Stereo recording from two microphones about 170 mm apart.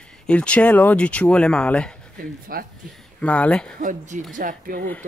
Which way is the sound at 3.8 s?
50° right (ahead or behind).